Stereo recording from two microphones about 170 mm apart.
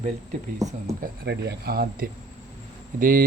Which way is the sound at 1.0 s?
70° right (ahead or behind).